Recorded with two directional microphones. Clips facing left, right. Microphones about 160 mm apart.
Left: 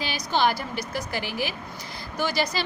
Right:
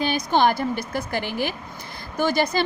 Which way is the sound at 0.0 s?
50° right (ahead or behind).